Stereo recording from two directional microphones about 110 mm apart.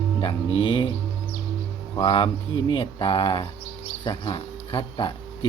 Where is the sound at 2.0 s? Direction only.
50° left (ahead or behind).